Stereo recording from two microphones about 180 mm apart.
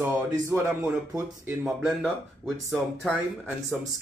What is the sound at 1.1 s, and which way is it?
Speech, 10° right (ahead or behind).